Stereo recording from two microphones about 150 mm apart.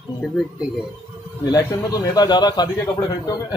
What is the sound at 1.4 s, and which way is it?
A man's voice, 20° left (ahead or behind).